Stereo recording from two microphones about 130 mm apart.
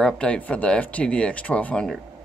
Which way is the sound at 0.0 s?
10° left (ahead or behind).